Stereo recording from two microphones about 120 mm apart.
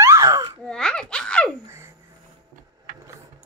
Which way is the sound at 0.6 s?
5° left (ahead or behind).